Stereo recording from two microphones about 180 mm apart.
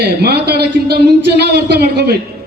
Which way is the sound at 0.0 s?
60° right (ahead or behind).